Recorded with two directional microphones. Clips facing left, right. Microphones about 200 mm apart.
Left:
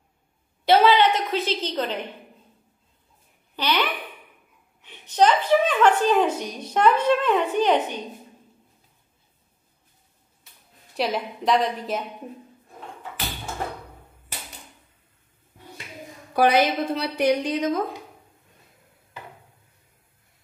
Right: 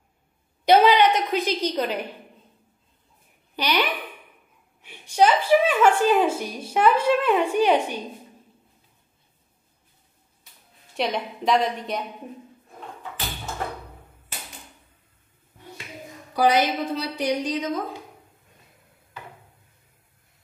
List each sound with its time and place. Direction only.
0.7 s a woman's voice: 15° right (ahead or behind)
3.5 s a woman's voice: 15° right (ahead or behind)
11.0 s a woman's voice: centre (ahead or behind)
16.3 s a woman's voice: 55° left (ahead or behind)